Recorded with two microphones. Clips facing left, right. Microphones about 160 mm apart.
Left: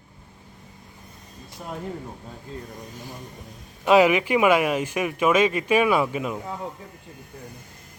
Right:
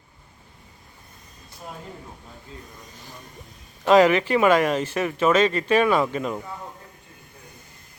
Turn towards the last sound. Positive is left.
turn(degrees=5)  # may be behind; listen again after turning